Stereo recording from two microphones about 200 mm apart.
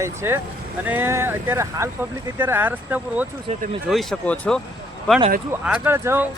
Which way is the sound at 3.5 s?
30° right (ahead or behind).